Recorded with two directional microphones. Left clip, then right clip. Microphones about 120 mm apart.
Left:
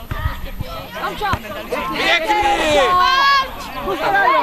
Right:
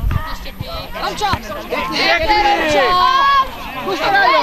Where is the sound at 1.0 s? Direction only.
35° right (ahead or behind).